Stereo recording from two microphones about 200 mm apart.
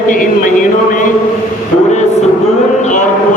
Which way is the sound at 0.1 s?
45° left (ahead or behind).